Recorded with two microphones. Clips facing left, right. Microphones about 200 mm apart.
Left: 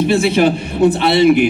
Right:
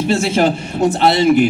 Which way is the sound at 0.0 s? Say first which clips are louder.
Left 2 dB; 60° left (ahead or behind).